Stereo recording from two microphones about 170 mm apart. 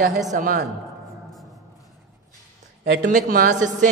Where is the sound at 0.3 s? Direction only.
55° right (ahead or behind).